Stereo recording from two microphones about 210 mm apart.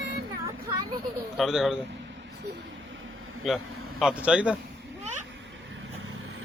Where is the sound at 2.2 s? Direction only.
55° right (ahead or behind).